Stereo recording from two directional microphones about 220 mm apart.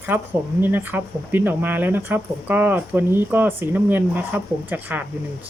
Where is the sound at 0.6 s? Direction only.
10° right (ahead or behind).